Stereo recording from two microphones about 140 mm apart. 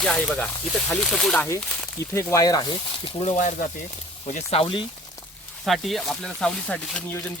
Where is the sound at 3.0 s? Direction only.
40° left (ahead or behind).